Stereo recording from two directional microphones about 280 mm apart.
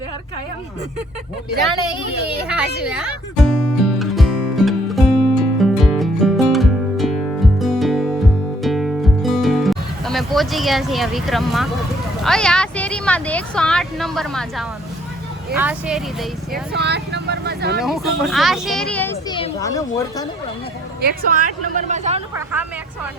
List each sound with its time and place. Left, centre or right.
2.5 s speech: centre
3.9 s music: centre
12.2 s speech: centre
16.7 s vehicle: right
17.7 s speech: centre
21.0 s speech: right